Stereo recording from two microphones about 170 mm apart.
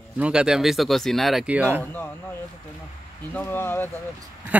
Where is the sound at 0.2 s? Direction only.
5° right (ahead or behind).